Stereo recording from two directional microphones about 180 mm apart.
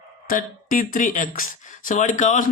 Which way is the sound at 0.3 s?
50° left (ahead or behind).